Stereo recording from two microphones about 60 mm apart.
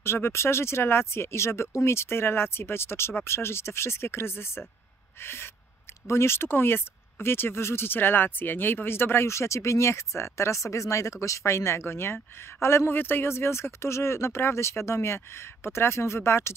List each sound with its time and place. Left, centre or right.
0.0 s speech: left
5.2 s owl: left
6.0 s speech: left